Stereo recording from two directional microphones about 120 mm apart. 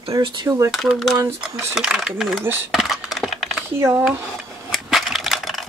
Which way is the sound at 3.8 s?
15° right (ahead or behind).